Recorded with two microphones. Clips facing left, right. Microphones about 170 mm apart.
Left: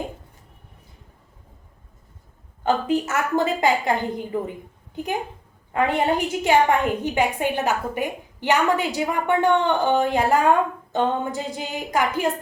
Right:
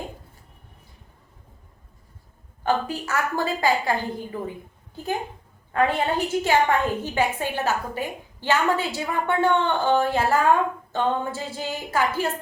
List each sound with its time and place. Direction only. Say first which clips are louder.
2.6 s a woman's voice: left 4 dB; 20° left (ahead or behind)
5.7 s a woman's voice: left 1 dB; 15° left (ahead or behind)